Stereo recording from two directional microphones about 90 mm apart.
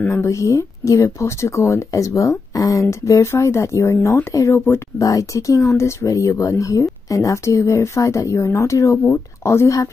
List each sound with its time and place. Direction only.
0.0 s speech: 30° left (ahead or behind)
4.6 s a sound: 25° left (ahead or behind)
5.0 s speech: 35° left (ahead or behind)